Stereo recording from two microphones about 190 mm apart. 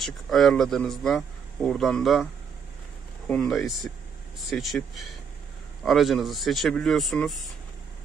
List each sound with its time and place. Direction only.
0.0 s speech: centre (ahead or behind)
3.3 s speech: centre (ahead or behind)